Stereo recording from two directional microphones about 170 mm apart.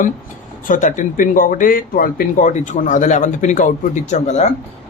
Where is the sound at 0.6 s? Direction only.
50° left (ahead or behind).